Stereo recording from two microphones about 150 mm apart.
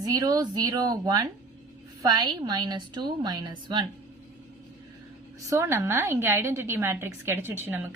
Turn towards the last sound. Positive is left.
turn(degrees=-15)  # may be behind; listen again after turning